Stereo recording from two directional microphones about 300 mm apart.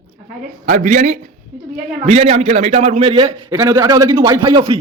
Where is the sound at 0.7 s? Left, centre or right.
Right.